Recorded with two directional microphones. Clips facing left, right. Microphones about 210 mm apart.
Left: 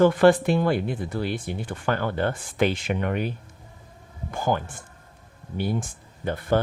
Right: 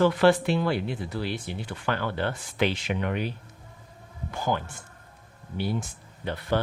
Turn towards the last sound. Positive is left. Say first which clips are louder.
# left 4 dB
turn(degrees=50)  # may be behind; listen again after turning